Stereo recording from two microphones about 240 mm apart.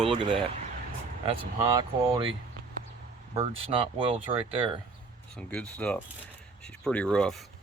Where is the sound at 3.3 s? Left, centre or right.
Right.